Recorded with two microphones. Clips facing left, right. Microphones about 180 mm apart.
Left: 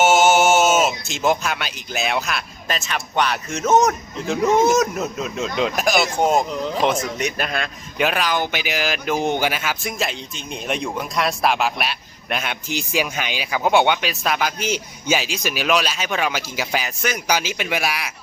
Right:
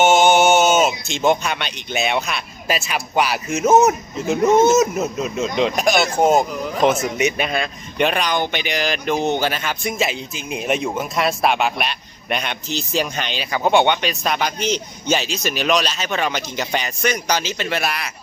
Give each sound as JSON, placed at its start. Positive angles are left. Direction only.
{"t": 0.0, "sound": "speech", "side_deg": 0}
{"t": 6.5, "sound": "speech", "side_deg": 25}
{"t": 6.7, "sound": "a man's voice", "side_deg": -5}